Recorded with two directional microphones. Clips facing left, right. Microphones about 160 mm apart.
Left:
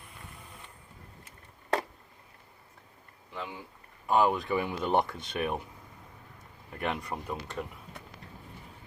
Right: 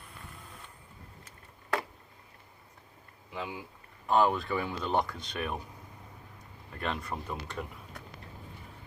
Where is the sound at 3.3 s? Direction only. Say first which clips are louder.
Right 1 dB; 10° right (ahead or behind).